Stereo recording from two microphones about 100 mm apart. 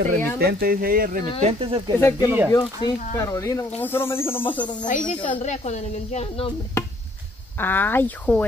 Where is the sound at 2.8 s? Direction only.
50° left (ahead or behind).